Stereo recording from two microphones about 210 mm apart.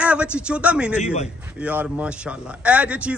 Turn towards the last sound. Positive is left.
turn(degrees=-5)  # may be behind; listen again after turning